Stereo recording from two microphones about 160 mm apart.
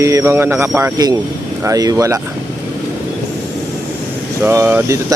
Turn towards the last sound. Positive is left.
turn(degrees=-15)  # may be behind; listen again after turning